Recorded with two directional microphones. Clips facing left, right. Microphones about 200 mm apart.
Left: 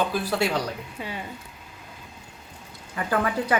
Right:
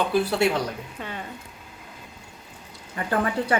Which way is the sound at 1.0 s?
10° left (ahead or behind).